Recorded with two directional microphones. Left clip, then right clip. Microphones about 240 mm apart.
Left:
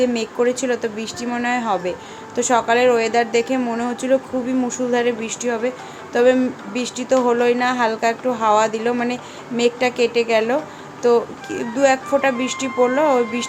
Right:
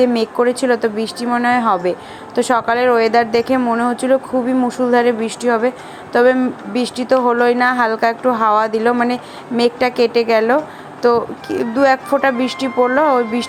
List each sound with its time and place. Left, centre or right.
0.0 s speech: centre